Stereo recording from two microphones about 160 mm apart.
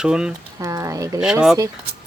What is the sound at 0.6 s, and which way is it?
Speech, 20° right (ahead or behind).